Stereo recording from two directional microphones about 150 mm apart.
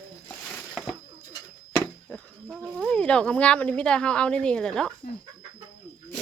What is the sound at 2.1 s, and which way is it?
Speech, 10° left (ahead or behind).